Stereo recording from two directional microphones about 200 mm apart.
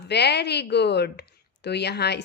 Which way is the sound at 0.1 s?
55° left (ahead or behind).